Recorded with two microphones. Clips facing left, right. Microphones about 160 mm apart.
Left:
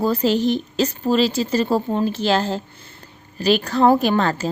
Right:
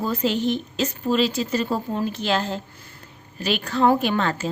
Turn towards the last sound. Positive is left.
turn(degrees=35)  # may be behind; listen again after turning